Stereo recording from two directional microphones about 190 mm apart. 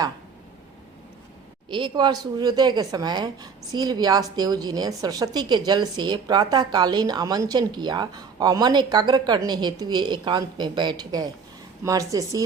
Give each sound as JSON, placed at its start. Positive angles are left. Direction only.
{"t": 1.7, "sound": "a woman's voice", "side_deg": -25}